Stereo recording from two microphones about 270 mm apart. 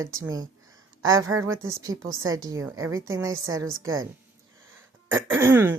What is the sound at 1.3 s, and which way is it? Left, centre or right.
Speech, right.